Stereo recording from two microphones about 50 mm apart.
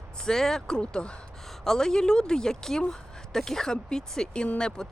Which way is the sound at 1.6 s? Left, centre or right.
Centre.